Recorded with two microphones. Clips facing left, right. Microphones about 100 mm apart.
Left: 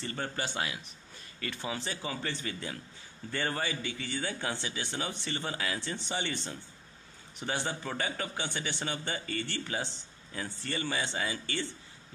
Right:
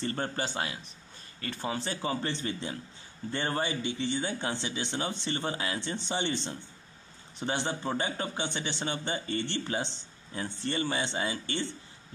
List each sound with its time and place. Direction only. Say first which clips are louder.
0.0 s a man's voice: right 3 dB; 35° right (ahead or behind)